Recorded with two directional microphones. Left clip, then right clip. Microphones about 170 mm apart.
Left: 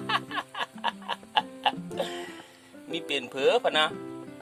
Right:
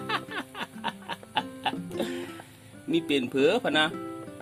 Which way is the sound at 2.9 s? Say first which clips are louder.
Right 4 dB; 40° left (ahead or behind).